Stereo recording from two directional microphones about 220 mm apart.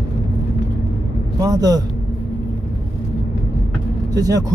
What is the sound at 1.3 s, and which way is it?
Speech, 15° right (ahead or behind).